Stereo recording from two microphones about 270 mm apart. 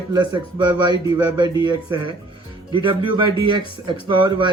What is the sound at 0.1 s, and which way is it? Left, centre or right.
Speech, centre.